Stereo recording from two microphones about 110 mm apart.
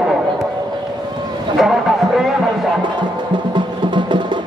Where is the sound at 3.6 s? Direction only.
45° right (ahead or behind).